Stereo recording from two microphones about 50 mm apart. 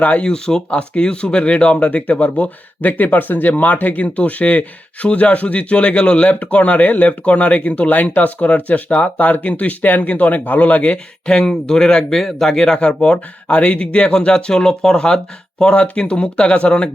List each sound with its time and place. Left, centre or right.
0.0 s speech: left
10.9 s speech: centre